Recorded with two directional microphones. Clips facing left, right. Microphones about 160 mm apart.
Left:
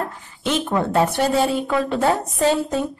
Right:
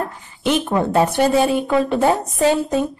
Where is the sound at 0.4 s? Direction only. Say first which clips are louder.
Right 3 dB; 15° right (ahead or behind).